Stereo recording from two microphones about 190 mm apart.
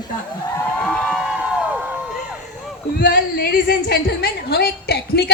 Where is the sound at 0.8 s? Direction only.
5° left (ahead or behind).